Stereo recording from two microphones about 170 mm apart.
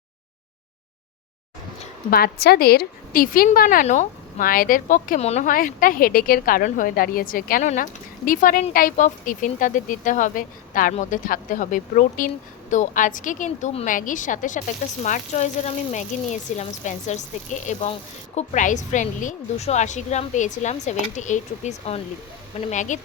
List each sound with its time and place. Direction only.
2.0 s a woman's voice: 65° left (ahead or behind); by 23.0 s 45° left (ahead or behind)